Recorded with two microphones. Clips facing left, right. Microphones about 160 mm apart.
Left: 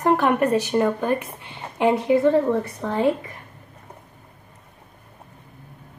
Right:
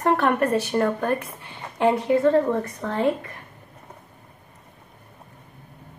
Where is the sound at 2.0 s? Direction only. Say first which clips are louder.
Left 2 dB; 10° left (ahead or behind).